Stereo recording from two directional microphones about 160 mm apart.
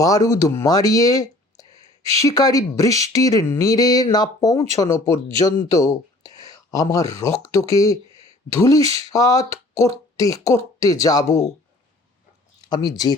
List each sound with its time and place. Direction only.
0.0 s speech: 20° left (ahead or behind)
8.0 s a sound: 35° right (ahead or behind)
8.4 s speech: 20° left (ahead or behind)
12.6 s speech: 25° left (ahead or behind)